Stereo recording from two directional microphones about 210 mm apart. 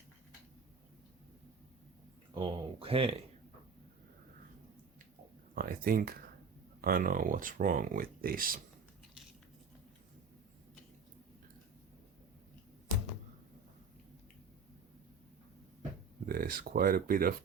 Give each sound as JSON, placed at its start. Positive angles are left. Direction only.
{"t": 2.3, "sound": "speech", "side_deg": -25}
{"t": 5.5, "sound": "speech", "side_deg": -45}
{"t": 16.3, "sound": "speech", "side_deg": -45}